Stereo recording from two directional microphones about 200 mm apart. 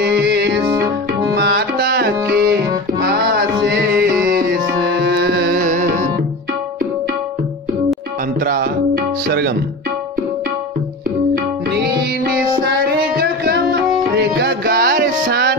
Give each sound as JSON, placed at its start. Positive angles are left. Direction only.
{"t": 0.0, "sound": "music", "side_deg": -55}
{"t": 0.7, "sound": "music", "side_deg": -15}
{"t": 1.3, "sound": "music", "side_deg": -55}
{"t": 8.5, "sound": "music", "side_deg": -50}
{"t": 13.1, "sound": "music", "side_deg": -50}